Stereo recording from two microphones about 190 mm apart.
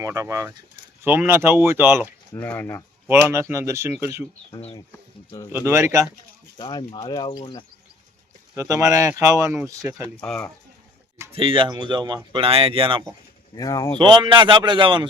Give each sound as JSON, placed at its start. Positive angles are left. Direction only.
{"t": 0.0, "sound": "speech", "side_deg": -15}
{"t": 2.3, "sound": "speech", "side_deg": 10}
{"t": 3.1, "sound": "speech", "side_deg": -10}
{"t": 4.5, "sound": "speech", "side_deg": 30}
{"t": 4.9, "sound": "speech", "side_deg": 15}
{"t": 5.5, "sound": "speech", "side_deg": -15}
{"t": 6.6, "sound": "speech", "side_deg": 20}
{"t": 8.5, "sound": "speech", "side_deg": -15}
{"t": 10.2, "sound": "speech", "side_deg": 5}
{"t": 11.3, "sound": "speech", "side_deg": -30}
{"t": 13.6, "sound": "speech", "side_deg": 20}
{"t": 14.0, "sound": "speech", "side_deg": -25}